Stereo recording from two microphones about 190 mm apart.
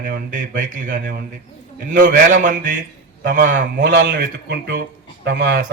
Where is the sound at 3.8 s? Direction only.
70° right (ahead or behind).